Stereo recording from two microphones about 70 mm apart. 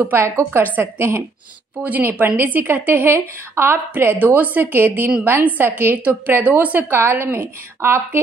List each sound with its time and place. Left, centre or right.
0.0 s a woman's voice: right
1.8 s a woman's voice: right